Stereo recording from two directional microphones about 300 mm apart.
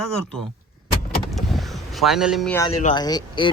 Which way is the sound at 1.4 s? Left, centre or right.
Centre.